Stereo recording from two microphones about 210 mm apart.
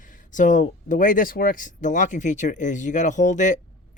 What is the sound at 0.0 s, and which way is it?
Speech, 40° left (ahead or behind).